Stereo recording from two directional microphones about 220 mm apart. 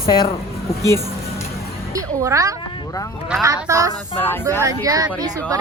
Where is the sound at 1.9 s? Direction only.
15° right (ahead or behind).